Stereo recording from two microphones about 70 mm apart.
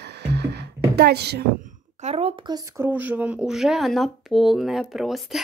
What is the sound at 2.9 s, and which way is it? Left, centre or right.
Speech, right.